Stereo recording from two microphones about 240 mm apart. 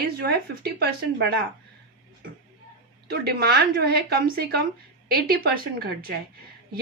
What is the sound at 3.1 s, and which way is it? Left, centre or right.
A woman's voice, right.